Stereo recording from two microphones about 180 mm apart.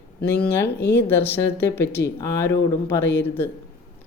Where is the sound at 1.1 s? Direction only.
10° left (ahead or behind).